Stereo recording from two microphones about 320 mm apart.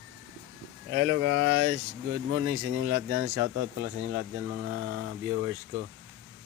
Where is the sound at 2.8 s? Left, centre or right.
Right.